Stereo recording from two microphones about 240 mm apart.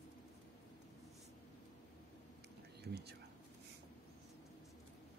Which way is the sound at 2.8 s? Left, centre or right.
Right.